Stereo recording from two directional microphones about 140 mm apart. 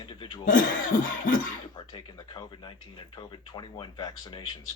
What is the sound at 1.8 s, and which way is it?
Speech, 35° left (ahead or behind).